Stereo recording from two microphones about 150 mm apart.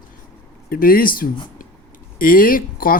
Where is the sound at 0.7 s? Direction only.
75° left (ahead or behind).